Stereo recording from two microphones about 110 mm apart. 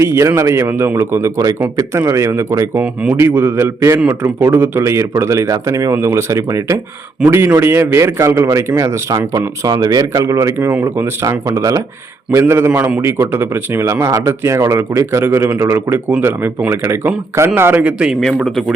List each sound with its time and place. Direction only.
0.0 s a man's voice: 25° right (ahead or behind)
2.8 s speech: 10° right (ahead or behind)
3.2 s a man's voice: 20° right (ahead or behind)